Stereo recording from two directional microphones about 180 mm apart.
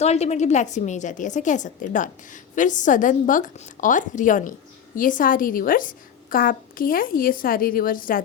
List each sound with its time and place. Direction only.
0.0 s a woman's voice: 35° left (ahead or behind)